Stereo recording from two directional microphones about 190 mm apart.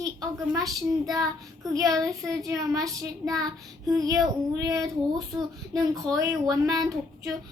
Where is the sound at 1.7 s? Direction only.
20° right (ahead or behind).